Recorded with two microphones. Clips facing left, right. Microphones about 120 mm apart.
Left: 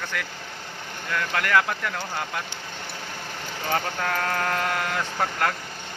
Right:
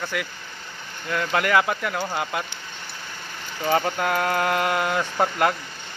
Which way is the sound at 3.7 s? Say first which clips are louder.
Right 5 dB; 15° right (ahead or behind).